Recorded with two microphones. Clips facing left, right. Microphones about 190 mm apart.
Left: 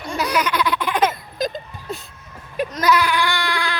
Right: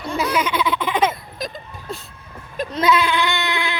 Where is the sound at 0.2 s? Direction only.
5° right (ahead or behind).